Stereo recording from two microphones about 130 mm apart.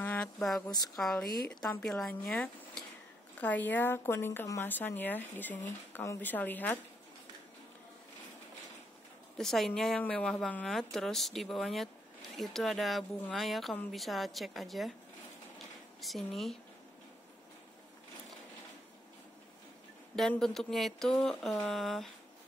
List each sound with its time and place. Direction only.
0.4 s a woman's voice: centre (ahead or behind)
9.4 s a woman's voice: 5° left (ahead or behind)
16.0 s a woman's voice: centre (ahead or behind)
20.2 s a woman's voice: 5° left (ahead or behind)